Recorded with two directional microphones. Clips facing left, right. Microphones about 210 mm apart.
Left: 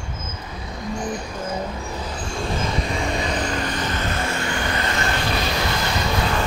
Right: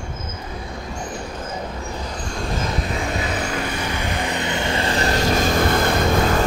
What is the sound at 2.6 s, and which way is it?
Vehicle, centre (ahead or behind).